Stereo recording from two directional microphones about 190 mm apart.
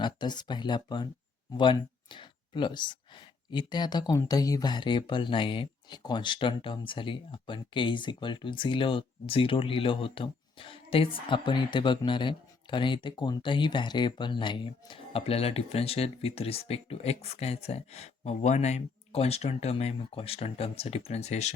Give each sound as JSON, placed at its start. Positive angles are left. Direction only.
{"t": 0.0, "sound": "speech", "side_deg": 25}